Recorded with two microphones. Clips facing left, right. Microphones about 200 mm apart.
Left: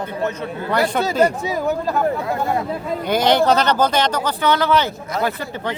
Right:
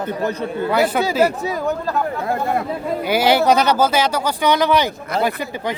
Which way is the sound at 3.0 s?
5° right (ahead or behind).